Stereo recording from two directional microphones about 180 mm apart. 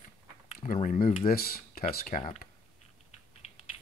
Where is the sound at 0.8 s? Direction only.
50° left (ahead or behind).